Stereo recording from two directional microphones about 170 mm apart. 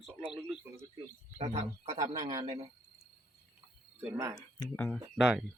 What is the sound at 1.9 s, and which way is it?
Speech, 20° right (ahead or behind).